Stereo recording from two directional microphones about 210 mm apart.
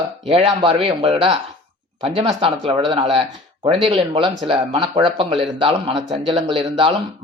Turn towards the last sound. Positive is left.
turn(degrees=-25)  # may be behind; listen again after turning